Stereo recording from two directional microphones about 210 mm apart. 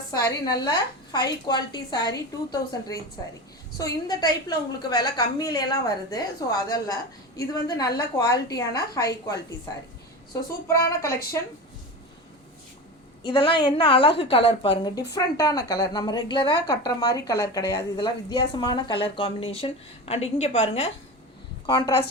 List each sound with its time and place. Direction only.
0.1 s a woman's voice: 20° left (ahead or behind)
10.7 s a woman's voice: 15° left (ahead or behind)
13.2 s a woman's voice: 25° left (ahead or behind)